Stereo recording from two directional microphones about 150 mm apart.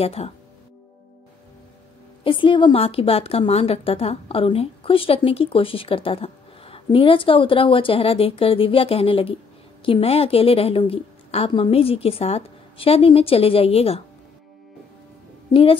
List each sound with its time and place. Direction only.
0.0 s a woman's voice: 40° left (ahead or behind)
2.2 s a woman's voice: 35° left (ahead or behind)
15.5 s a woman's voice: 35° left (ahead or behind)